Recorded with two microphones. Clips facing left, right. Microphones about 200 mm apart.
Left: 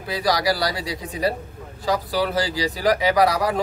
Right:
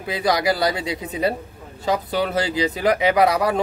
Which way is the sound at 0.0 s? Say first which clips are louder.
Right 1 dB; 20° right (ahead or behind).